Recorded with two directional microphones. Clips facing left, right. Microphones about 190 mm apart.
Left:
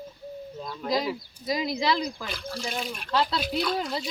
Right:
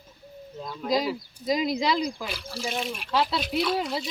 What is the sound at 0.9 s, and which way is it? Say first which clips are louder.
Speech: right 2 dB; 15° right (ahead or behind).